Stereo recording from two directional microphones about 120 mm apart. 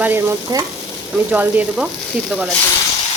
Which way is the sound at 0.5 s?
30° right (ahead or behind).